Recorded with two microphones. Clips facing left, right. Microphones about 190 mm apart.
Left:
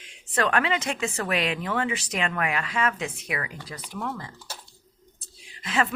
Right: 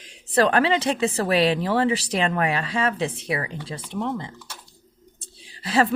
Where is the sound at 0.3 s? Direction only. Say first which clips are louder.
Right 5 dB; 35° right (ahead or behind).